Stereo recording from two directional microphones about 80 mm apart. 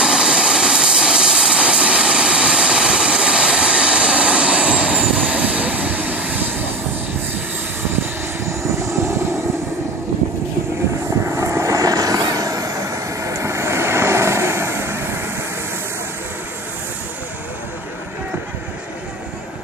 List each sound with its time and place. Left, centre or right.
0.0 s vehicle: centre
8.5 s vehicle: right
11.2 s vehicle: right